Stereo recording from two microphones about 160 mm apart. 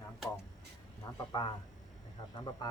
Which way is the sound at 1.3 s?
25° left (ahead or behind).